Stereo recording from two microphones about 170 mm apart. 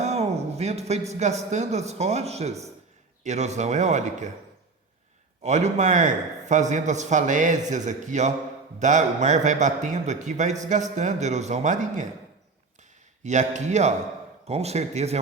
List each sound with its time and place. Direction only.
0.0 s a sound: 40° right (ahead or behind)
1.1 s speech: 40° right (ahead or behind)
5.4 s speech: 40° right (ahead or behind)
13.2 s speech: 45° right (ahead or behind)